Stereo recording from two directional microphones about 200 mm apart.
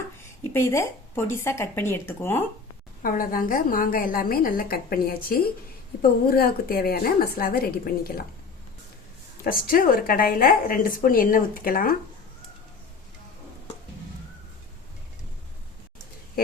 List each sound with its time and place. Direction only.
0.2 s a woman's voice: 15° left (ahead or behind)
3.0 s a woman's voice: 45° left (ahead or behind)
9.4 s a woman's voice: 45° left (ahead or behind)